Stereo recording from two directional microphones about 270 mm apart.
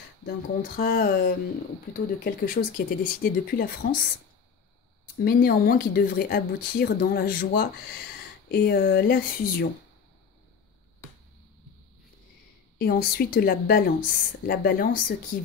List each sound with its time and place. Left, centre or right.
0.2 s speech: left
5.2 s speech: left
12.7 s speech: left